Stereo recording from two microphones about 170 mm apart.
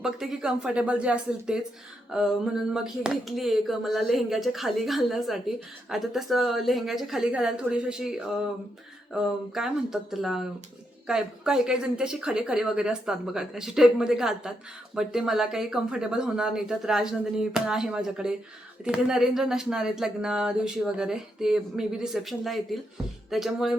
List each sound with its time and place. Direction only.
0.0 s speech: 5° right (ahead or behind)
9.1 s speech: 5° right (ahead or behind)